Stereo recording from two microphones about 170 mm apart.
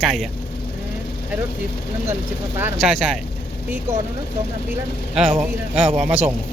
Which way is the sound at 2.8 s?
Centre (ahead or behind).